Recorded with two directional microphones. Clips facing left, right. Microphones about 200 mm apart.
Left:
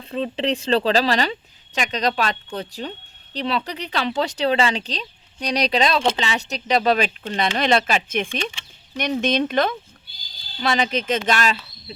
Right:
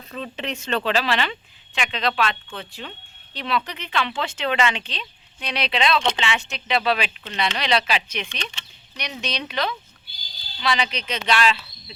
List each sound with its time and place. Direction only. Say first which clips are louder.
0.0 s speech: left 7 dB; 30° left (ahead or behind)